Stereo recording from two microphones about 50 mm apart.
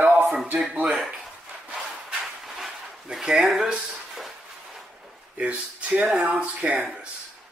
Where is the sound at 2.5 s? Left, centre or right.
Centre.